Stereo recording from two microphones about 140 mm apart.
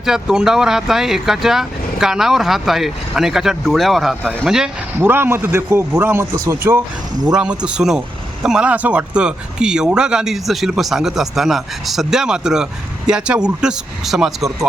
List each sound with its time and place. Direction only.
0.0 s speech: 5° right (ahead or behind)
4.9 s speech: 15° right (ahead or behind)